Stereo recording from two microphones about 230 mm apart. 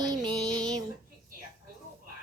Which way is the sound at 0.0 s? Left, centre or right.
Centre.